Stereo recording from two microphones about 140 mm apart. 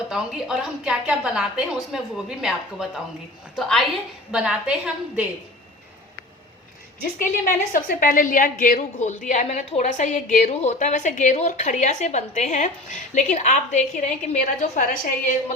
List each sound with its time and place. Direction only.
0.1 s a woman's voice: 5° right (ahead or behind)
7.2 s a woman's voice: 70° left (ahead or behind)